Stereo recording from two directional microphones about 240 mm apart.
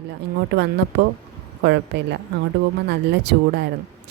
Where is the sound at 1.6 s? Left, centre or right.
Right.